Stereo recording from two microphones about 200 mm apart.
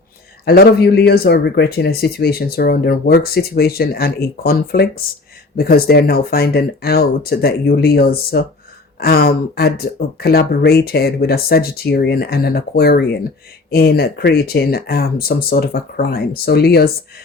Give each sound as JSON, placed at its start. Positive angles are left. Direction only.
{"t": 0.4, "sound": "speech", "side_deg": 50}